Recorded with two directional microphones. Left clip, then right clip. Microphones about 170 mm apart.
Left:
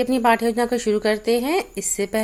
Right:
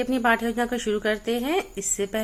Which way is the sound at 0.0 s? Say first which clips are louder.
Left 4 dB; 30° left (ahead or behind).